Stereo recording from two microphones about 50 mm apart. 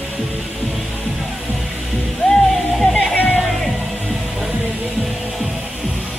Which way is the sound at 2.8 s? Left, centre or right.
Centre.